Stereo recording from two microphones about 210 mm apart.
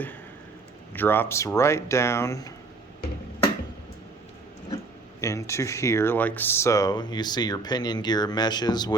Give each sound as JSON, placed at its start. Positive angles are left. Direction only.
{"t": 0.9, "sound": "speech", "side_deg": 10}
{"t": 5.2, "sound": "speech", "side_deg": 15}